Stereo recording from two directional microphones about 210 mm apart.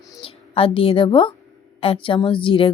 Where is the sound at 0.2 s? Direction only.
25° left (ahead or behind).